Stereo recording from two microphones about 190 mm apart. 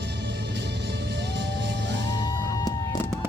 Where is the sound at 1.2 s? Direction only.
65° right (ahead or behind).